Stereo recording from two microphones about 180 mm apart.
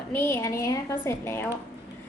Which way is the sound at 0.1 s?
15° left (ahead or behind).